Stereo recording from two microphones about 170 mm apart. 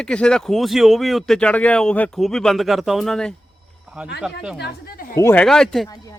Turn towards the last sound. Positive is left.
turn(degrees=5)  # may be behind; listen again after turning